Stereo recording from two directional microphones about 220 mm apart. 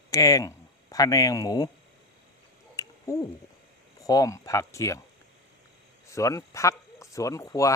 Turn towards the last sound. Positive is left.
turn(degrees=15)  # may be behind; listen again after turning